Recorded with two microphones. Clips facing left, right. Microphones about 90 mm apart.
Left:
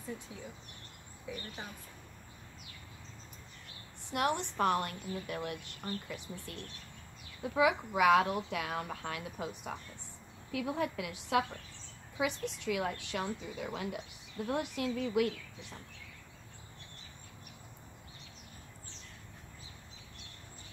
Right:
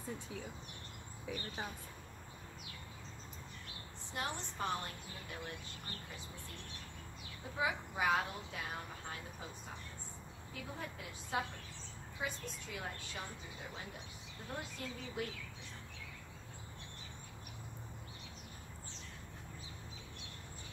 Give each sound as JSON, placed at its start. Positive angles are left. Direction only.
{"t": 4.1, "sound": "a woman's voice", "side_deg": 65}